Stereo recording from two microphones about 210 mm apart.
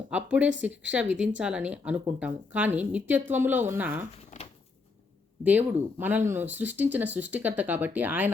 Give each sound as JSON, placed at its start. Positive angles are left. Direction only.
{"t": 0.1, "sound": "speech", "side_deg": -5}
{"t": 4.3, "sound": "a sound", "side_deg": 35}
{"t": 5.4, "sound": "speech", "side_deg": -10}